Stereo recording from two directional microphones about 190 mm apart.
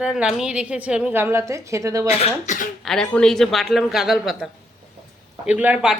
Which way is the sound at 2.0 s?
35° left (ahead or behind).